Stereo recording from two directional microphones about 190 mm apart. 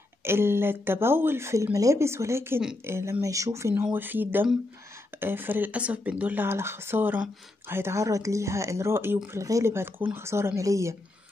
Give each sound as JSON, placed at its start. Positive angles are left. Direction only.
{"t": 0.2, "sound": "speech", "side_deg": -15}
{"t": 2.6, "sound": "a woman's voice", "side_deg": -5}
{"t": 3.0, "sound": "speech", "side_deg": -15}